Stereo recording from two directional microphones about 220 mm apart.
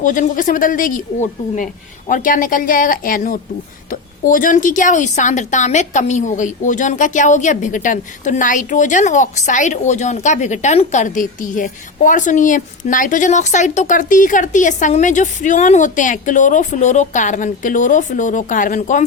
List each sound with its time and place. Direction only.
0.0 s a woman's voice: 35° left (ahead or behind)